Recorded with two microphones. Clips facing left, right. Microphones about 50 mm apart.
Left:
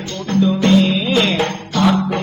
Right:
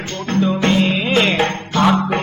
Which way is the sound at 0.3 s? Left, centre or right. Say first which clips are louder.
Left 3 dB; right.